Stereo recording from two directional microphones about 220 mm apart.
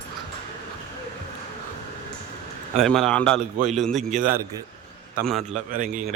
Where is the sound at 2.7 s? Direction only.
Centre (ahead or behind).